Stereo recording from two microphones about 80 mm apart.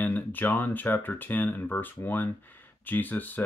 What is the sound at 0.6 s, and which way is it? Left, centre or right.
Speech, left.